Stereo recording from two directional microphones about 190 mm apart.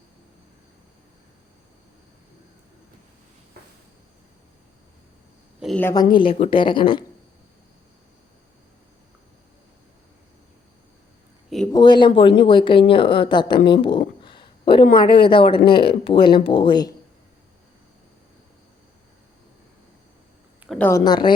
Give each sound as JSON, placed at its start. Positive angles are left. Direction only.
{"t": 5.5, "sound": "a sound", "side_deg": 0}
{"t": 5.8, "sound": "speech", "side_deg": 20}
{"t": 11.7, "sound": "speech", "side_deg": 25}
{"t": 13.7, "sound": "a sound", "side_deg": 25}
{"t": 14.9, "sound": "speech", "side_deg": 25}
{"t": 20.7, "sound": "speech", "side_deg": 10}
{"t": 21.0, "sound": "speech", "side_deg": 25}